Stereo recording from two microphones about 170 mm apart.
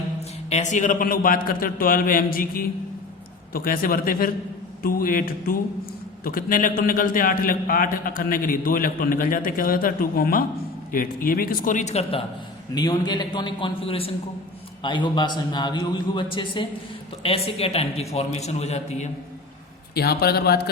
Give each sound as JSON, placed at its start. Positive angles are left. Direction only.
{"t": 0.5, "sound": "a man's voice", "side_deg": 45}
{"t": 12.7, "sound": "a man's voice", "side_deg": 25}
{"t": 19.9, "sound": "a man's voice", "side_deg": 65}